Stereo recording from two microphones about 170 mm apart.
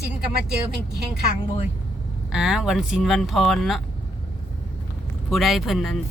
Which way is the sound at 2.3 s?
5° right (ahead or behind).